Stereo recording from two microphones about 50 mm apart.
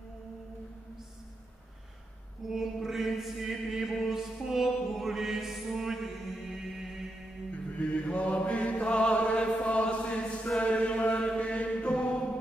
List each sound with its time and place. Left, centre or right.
2.4 s chant: centre
6.5 s mantra: centre
7.5 s music: left
10.6 s chant: left